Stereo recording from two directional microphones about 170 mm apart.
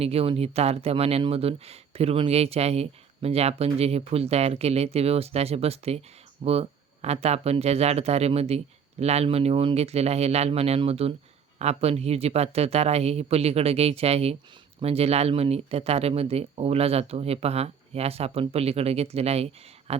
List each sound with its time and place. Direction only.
0.0 s speech: 35° right (ahead or behind)